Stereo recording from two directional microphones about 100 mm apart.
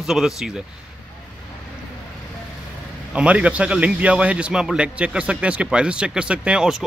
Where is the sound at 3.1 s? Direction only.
10° right (ahead or behind).